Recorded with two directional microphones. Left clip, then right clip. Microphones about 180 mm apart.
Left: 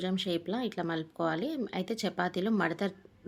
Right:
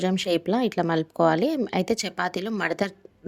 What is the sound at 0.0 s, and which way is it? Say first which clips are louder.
Speech: right 9 dB; 45° right (ahead or behind).